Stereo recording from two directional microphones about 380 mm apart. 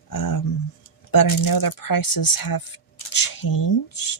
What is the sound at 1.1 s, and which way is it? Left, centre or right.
Speech, left.